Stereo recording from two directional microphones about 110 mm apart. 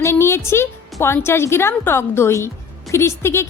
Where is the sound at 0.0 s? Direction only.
25° left (ahead or behind).